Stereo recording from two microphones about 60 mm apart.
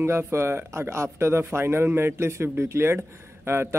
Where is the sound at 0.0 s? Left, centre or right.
Right.